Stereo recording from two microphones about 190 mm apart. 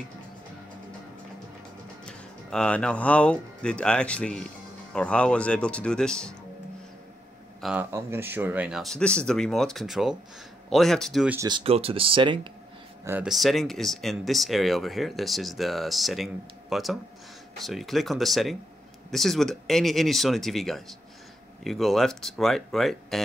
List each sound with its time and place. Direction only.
2.0 s speech: 5° left (ahead or behind)
7.6 s speech: 10° right (ahead or behind)
11.3 s speech: 25° right (ahead or behind)
13.0 s speech: 5° right (ahead or behind)